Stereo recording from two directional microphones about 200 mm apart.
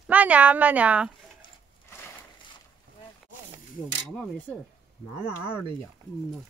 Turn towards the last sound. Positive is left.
turn(degrees=-5)  # may be behind; listen again after turning